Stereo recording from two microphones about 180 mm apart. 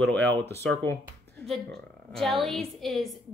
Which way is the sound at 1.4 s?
Centre (ahead or behind).